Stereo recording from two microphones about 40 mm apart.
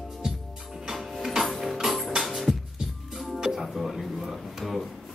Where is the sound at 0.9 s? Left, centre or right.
Centre.